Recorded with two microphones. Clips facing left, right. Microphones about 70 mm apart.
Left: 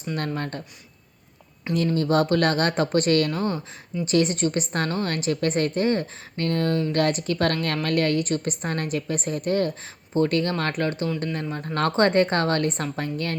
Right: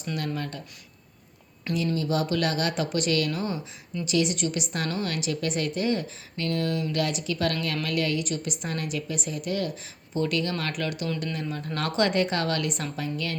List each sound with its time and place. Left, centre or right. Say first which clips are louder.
0.3 s speech: left 3 dB; left
1.7 s speech: left 4 dB; left
2.0 s a woman's voice: left 8 dB; left